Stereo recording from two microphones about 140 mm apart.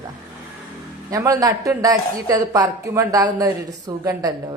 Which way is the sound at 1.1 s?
25° right (ahead or behind).